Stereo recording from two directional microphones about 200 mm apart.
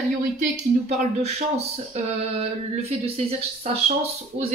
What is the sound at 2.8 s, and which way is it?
Speech, 30° right (ahead or behind).